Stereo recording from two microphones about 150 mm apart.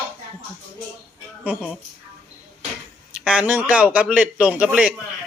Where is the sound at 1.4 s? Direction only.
10° right (ahead or behind).